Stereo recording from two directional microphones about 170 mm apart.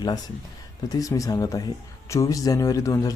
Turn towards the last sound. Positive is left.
turn(degrees=20)  # may be behind; listen again after turning